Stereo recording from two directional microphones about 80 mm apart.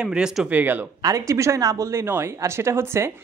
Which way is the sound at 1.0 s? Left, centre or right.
Right.